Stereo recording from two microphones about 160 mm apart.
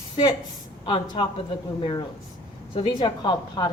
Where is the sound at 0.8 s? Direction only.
30° left (ahead or behind).